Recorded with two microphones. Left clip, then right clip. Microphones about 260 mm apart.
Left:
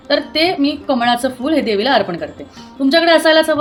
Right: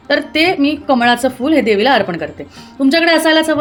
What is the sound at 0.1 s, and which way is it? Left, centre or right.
A woman's voice, right.